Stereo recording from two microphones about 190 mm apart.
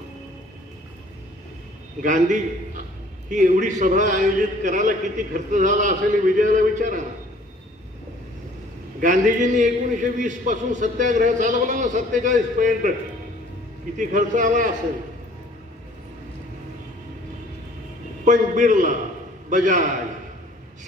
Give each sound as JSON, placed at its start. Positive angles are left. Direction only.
{"t": 2.0, "sound": "a man's voice", "side_deg": -40}
{"t": 9.0, "sound": "a man's voice", "side_deg": -40}
{"t": 13.9, "sound": "a man's voice", "side_deg": -40}
{"t": 18.2, "sound": "a man's voice", "side_deg": -40}